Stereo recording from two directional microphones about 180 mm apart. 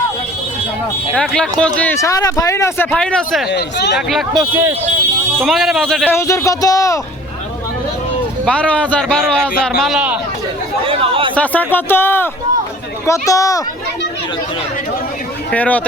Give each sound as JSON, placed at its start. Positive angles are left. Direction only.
{"t": 1.1, "sound": "speech", "side_deg": 5}
{"t": 2.9, "sound": "a man's voice", "side_deg": 5}
{"t": 3.5, "sound": "speech", "side_deg": 70}
{"t": 4.1, "sound": "a man's voice", "side_deg": 0}
{"t": 6.1, "sound": "speech", "side_deg": 15}
{"t": 8.4, "sound": "a man's voice", "side_deg": 5}
{"t": 10.8, "sound": "a sound", "side_deg": -30}
{"t": 11.3, "sound": "speech", "side_deg": 10}
{"t": 15.4, "sound": "speech", "side_deg": 10}